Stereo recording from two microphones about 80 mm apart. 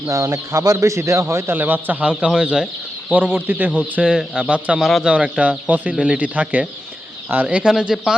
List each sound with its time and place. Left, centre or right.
0.1 s speech: right; by 4.8 s centre
4.8 s speech: centre
5.0 s speech: centre